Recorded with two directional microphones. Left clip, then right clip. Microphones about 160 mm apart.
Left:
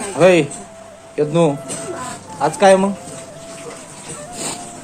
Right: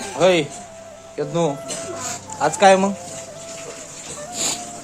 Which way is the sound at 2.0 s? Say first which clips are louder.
Left 1 dB; 15° right (ahead or behind).